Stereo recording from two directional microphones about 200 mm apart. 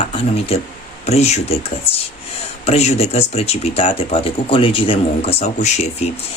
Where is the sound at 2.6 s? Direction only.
30° left (ahead or behind).